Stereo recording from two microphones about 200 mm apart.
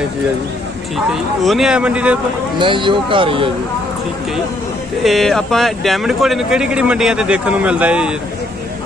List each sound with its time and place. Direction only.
0.9 s speech: centre (ahead or behind)
2.6 s speech: 25° right (ahead or behind)
5.0 s speech: centre (ahead or behind)